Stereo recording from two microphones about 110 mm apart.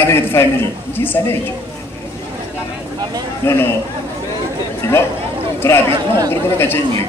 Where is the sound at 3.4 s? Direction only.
25° left (ahead or behind).